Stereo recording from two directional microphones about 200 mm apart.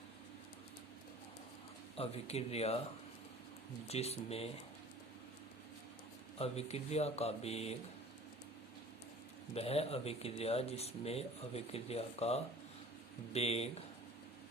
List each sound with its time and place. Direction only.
2.0 s speech: 30° left (ahead or behind)
3.8 s speech: 30° left (ahead or behind)
6.4 s speech: 30° left (ahead or behind)
9.6 s speech: 30° left (ahead or behind)